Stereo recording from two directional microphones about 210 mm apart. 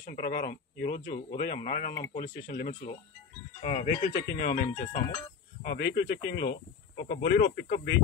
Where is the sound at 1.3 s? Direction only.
50° left (ahead or behind).